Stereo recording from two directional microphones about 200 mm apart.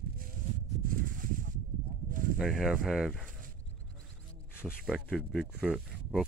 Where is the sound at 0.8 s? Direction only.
45° right (ahead or behind).